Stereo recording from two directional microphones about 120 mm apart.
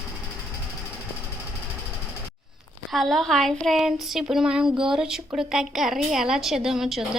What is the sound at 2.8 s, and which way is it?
Speech, centre (ahead or behind).